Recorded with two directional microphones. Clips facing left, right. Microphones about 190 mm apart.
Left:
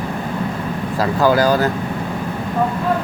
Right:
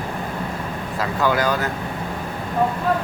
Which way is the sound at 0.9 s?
35° left (ahead or behind).